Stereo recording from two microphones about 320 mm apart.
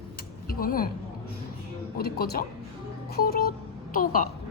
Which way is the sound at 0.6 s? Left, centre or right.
Left.